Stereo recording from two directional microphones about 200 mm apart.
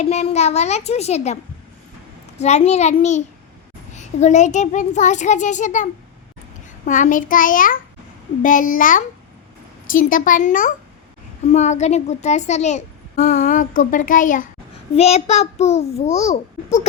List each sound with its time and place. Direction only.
0.0 s a child's voice: 35° left (ahead or behind)
2.4 s a child's voice: 35° left (ahead or behind)